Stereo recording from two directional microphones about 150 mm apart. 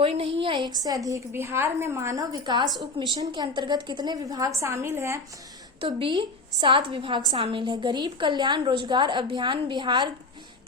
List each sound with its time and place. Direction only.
0.0 s a woman's voice: 40° right (ahead or behind); by 5.2 s 20° right (ahead or behind)
5.8 s a woman's voice: 35° right (ahead or behind)